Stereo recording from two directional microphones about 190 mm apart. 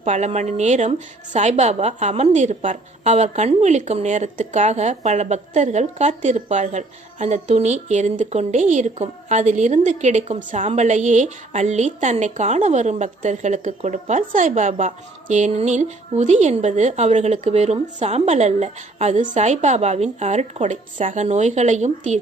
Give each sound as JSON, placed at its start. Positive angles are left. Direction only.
{"t": 0.0, "sound": "a woman's voice", "side_deg": -35}